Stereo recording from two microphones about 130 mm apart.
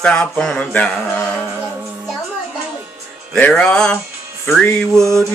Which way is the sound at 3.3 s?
10° left (ahead or behind).